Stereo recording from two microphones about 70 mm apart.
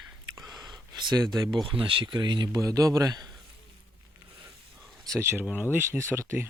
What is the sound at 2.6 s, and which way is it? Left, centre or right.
Speech, right.